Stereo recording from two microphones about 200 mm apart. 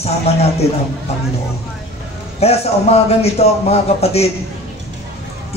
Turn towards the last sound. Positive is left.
turn(degrees=30)  # may be behind; listen again after turning